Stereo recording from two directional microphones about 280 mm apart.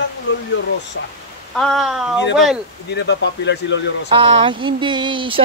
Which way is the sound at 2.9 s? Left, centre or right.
Left.